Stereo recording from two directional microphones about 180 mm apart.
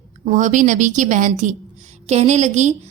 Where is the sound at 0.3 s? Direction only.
45° right (ahead or behind).